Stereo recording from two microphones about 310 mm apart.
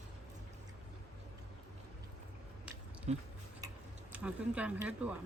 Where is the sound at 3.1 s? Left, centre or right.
Right.